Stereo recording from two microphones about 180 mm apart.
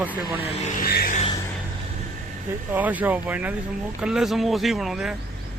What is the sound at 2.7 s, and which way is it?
Speech, 10° right (ahead or behind).